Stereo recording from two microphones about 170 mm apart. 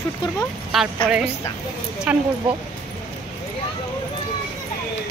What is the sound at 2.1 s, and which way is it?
Speech, 5° right (ahead or behind).